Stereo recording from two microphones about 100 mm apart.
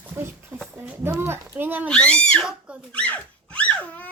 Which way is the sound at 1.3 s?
20° right (ahead or behind).